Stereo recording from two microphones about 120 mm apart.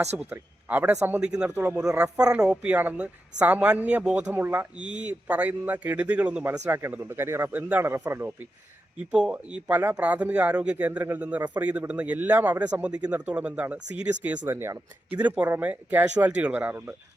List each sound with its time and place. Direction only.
0.3 s a man's voice: 15° right (ahead or behind)